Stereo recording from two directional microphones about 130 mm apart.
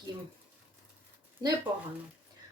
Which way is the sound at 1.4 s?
35° right (ahead or behind).